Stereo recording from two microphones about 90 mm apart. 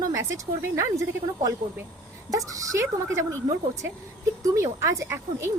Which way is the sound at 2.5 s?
35° right (ahead or behind).